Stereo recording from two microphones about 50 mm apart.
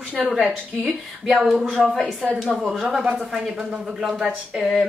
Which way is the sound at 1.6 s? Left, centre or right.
Centre.